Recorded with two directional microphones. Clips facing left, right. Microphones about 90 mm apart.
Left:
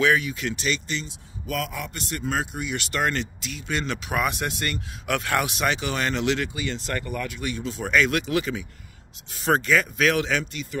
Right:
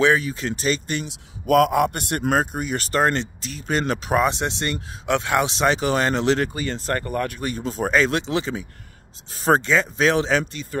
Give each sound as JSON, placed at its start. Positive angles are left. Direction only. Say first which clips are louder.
{"t": 0.0, "sound": "speech", "louder": "right 3 dB", "side_deg": -30}
{"t": 0.9, "sound": "a man's voice", "louder": "right 4 dB", "side_deg": -55}
{"t": 2.3, "sound": "speech", "louder": "right 5 dB", "side_deg": -45}